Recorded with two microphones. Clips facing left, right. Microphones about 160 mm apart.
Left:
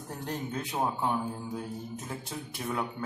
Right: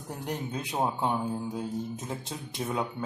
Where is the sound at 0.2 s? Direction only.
15° right (ahead or behind).